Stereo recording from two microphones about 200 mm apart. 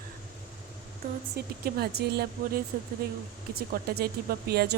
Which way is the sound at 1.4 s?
50° right (ahead or behind).